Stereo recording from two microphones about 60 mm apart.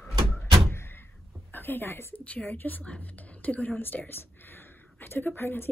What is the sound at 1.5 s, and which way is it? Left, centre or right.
Speech, left.